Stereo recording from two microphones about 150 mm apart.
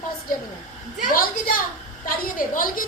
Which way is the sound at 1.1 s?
70° left (ahead or behind).